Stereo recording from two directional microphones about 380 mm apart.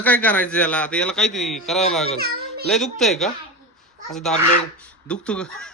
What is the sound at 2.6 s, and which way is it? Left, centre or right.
A man's voice, centre.